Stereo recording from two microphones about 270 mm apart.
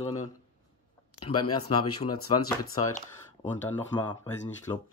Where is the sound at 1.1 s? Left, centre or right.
Left.